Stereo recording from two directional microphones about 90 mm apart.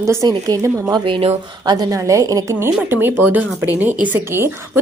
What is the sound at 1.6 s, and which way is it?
Speech, 55° right (ahead or behind).